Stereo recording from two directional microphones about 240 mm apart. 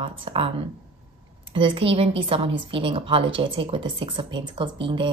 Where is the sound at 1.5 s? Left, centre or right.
Right.